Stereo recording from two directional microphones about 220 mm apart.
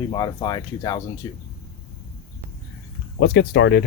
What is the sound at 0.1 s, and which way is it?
Speech, 20° left (ahead or behind).